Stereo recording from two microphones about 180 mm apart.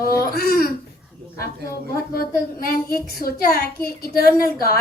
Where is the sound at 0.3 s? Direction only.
55° left (ahead or behind).